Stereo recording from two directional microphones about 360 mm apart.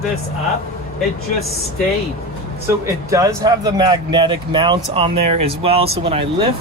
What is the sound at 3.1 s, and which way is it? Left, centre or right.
Speech, centre.